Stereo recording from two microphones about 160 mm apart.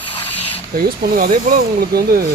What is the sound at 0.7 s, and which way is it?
A man's voice, 65° right (ahead or behind).